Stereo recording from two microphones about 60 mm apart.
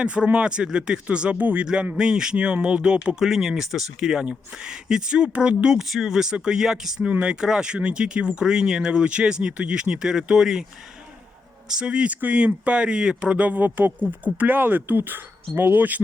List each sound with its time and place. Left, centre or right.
0.0 s speech: centre
3.2 s speech: centre
11.7 s speech: centre